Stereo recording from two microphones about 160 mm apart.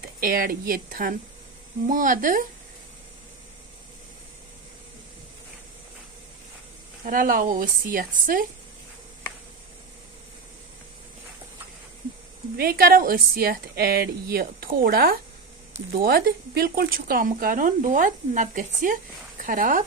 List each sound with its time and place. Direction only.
0.2 s speech: 65° right (ahead or behind)
7.1 s speech: 60° right (ahead or behind)
12.5 s speech: 70° right (ahead or behind)